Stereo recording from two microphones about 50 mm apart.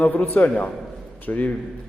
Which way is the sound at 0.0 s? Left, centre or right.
Left.